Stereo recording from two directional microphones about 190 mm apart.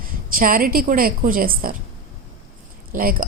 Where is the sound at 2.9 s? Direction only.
50° right (ahead or behind).